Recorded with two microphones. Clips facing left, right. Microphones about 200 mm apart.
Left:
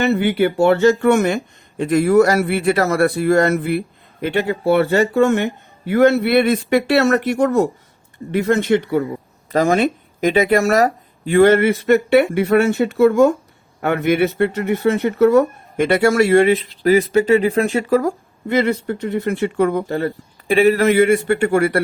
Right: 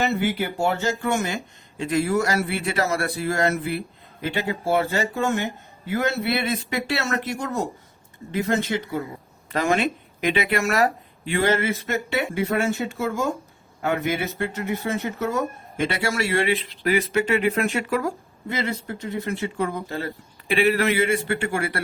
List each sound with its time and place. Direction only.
0.0 s a man's voice: 65° left (ahead or behind)
9.5 s speech: 40° left (ahead or behind)
11.3 s a man's voice: 55° left (ahead or behind)
16.9 s speech: 35° left (ahead or behind)
18.4 s a man's voice: 60° left (ahead or behind)
20.5 s speech: 40° left (ahead or behind)